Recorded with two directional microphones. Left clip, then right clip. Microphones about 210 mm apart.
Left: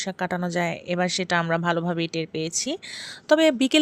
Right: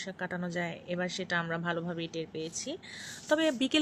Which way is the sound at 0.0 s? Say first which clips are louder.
Left 10 dB; 50° left (ahead or behind).